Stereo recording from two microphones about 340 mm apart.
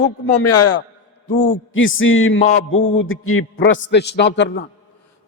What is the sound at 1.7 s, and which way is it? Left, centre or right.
A man's voice, left.